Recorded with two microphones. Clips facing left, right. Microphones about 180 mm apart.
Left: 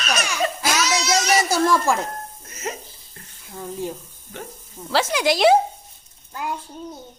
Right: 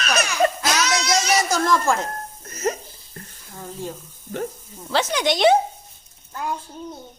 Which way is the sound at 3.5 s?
15° left (ahead or behind).